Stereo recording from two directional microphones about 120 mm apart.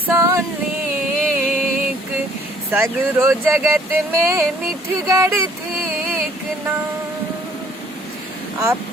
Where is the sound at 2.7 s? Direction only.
20° right (ahead or behind).